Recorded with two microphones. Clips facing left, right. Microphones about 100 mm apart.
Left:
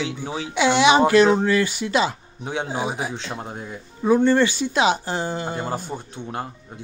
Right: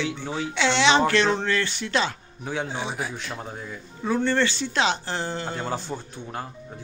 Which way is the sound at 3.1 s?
25° left (ahead or behind).